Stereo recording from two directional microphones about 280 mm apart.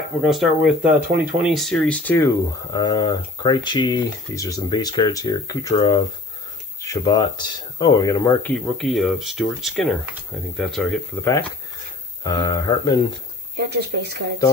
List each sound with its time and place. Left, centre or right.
0.2 s speech: centre
13.6 s speech: right